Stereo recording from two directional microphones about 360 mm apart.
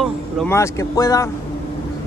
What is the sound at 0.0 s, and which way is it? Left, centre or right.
Speech, centre.